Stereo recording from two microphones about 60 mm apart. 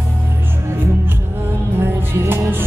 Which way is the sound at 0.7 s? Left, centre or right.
Right.